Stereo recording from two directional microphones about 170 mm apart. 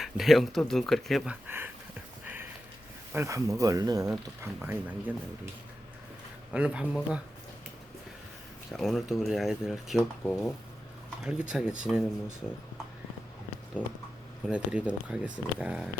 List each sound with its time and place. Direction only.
0.0 s speech: centre (ahead or behind)
2.2 s a sound: 10° right (ahead or behind)
3.1 s speech: 15° right (ahead or behind)
6.5 s speech: 5° right (ahead or behind)
8.7 s speech: centre (ahead or behind)
11.2 s speech: 5° right (ahead or behind)
14.4 s speech: 5° right (ahead or behind)